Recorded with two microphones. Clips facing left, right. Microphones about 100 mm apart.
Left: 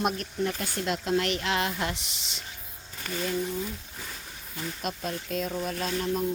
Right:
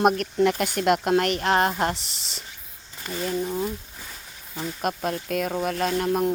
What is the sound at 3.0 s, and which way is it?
Speech, 30° right (ahead or behind).